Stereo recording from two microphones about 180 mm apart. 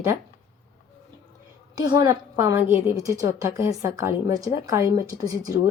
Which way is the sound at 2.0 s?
15° right (ahead or behind).